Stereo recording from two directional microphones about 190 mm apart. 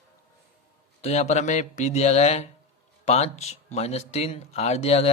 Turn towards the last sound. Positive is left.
turn(degrees=35)  # may be behind; listen again after turning